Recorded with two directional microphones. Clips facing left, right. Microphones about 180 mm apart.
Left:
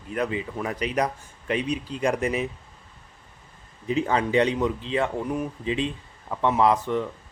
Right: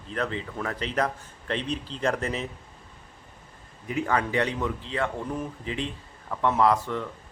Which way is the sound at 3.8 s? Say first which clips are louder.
Left 3 dB; 25° left (ahead or behind).